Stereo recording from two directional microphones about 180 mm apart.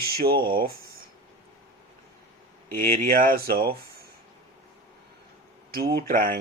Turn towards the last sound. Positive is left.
turn(degrees=-50)  # may be behind; listen again after turning